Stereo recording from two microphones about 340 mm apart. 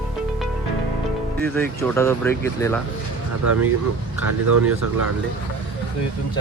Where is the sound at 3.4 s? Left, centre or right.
Right.